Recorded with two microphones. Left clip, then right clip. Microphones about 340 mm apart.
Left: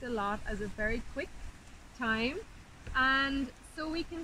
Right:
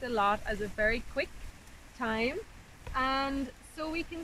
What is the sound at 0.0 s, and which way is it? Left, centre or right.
Speech, right.